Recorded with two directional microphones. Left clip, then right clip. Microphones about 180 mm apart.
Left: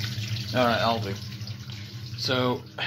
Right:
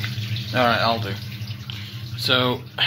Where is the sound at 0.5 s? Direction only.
15° left (ahead or behind).